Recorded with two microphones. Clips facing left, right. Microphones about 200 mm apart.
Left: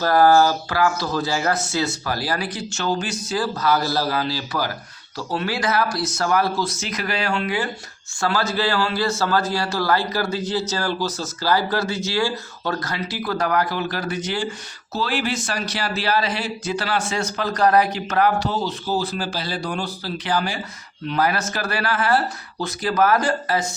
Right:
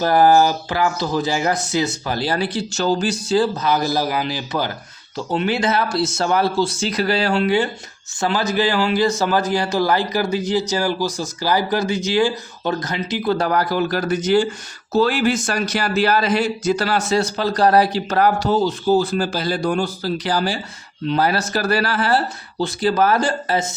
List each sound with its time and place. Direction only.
0.0 s speech: 15° right (ahead or behind)
8.2 s a man's voice: 20° right (ahead or behind)